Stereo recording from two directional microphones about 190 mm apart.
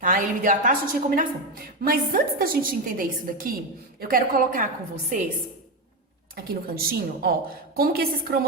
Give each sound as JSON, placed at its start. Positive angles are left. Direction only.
{"t": 0.0, "sound": "a woman's voice", "side_deg": -45}
{"t": 6.3, "sound": "a woman's voice", "side_deg": -50}